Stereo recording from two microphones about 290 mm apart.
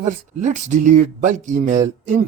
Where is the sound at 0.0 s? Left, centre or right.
Right.